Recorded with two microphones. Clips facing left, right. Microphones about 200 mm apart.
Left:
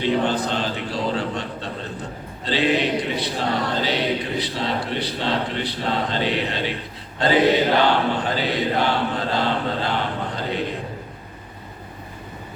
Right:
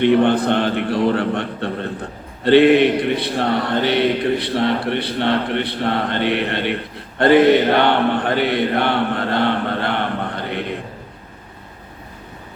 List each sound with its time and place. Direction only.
0.0 s a man's voice: 60° right (ahead or behind)